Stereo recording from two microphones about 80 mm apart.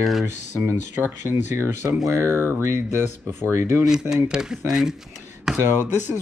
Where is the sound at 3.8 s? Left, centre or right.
Centre.